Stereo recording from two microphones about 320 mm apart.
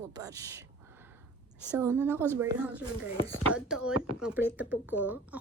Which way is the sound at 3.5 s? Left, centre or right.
Centre.